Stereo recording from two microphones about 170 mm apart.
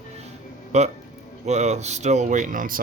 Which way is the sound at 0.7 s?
40° right (ahead or behind).